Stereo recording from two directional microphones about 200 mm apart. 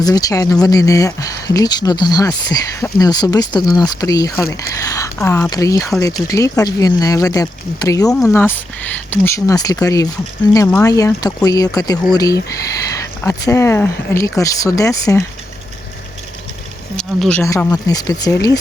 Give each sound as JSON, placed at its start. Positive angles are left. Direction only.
{"t": 0.0, "sound": "speech", "side_deg": 20}
{"t": 17.0, "sound": "speech", "side_deg": 5}
{"t": 17.4, "sound": "speech", "side_deg": 15}